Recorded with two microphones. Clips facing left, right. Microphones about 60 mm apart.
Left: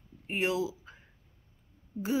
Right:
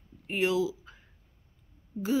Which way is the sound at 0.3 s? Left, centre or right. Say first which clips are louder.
Right 3 dB; left.